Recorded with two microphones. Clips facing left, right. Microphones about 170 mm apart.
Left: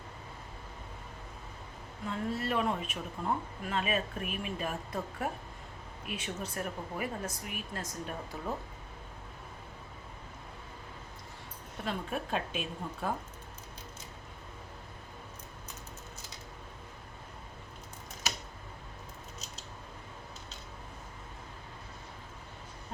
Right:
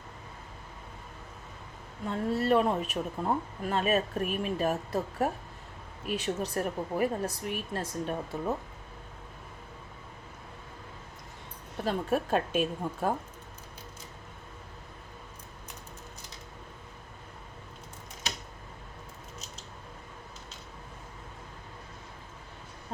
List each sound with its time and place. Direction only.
2.0 s speech: 35° right (ahead or behind)
11.9 s a woman's voice: 45° right (ahead or behind)